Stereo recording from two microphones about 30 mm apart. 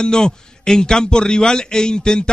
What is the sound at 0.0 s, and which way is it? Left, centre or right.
Speech, left.